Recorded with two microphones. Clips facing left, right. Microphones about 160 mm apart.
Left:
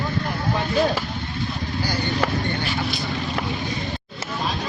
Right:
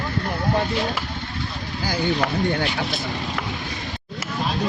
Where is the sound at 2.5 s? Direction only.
90° right.